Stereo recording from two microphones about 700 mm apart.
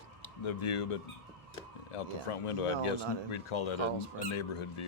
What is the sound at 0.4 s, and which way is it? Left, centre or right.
Speech, left.